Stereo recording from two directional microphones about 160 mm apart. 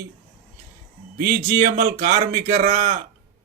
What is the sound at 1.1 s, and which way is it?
A man's voice, 50° right (ahead or behind).